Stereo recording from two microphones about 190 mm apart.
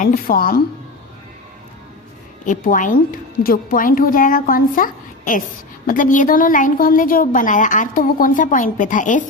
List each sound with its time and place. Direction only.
0.0 s a woman's voice: 50° left (ahead or behind)
2.4 s a woman's voice: 45° left (ahead or behind)